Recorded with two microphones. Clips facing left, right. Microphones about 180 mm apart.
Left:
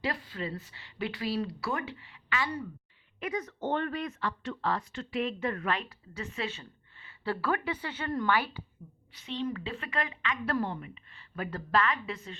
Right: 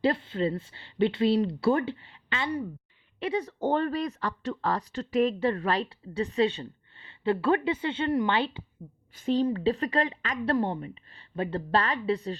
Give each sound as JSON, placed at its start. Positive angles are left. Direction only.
{"t": 0.0, "sound": "speech", "side_deg": -25}
{"t": 9.1, "sound": "speech", "side_deg": -45}